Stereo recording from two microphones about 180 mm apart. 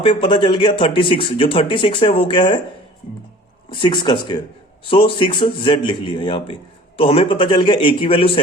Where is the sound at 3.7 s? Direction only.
25° left (ahead or behind).